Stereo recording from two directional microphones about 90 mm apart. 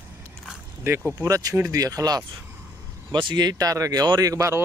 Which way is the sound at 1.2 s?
40° right (ahead or behind).